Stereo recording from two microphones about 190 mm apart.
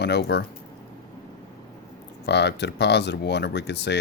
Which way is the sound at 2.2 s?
65° left (ahead or behind).